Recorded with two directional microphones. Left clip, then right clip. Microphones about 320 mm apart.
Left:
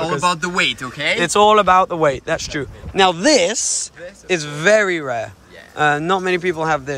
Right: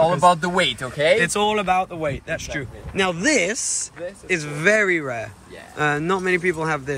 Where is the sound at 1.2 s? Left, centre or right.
Centre.